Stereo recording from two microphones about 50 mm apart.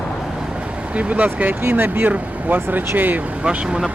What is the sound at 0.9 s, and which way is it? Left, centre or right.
Speech, right.